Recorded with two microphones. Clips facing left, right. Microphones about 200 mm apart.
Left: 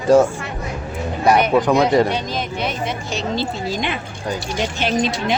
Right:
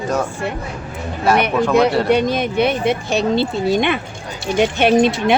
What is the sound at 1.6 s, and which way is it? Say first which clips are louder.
Speech: even; 15° left (ahead or behind).